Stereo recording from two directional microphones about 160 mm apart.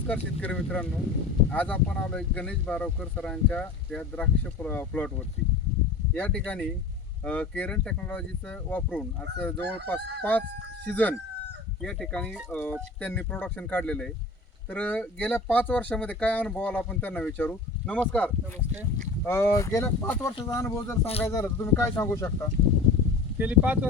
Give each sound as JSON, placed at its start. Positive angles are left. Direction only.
{"t": 0.1, "sound": "speech", "side_deg": 10}
{"t": 6.1, "sound": "speech", "side_deg": 10}
{"t": 23.4, "sound": "speech", "side_deg": -10}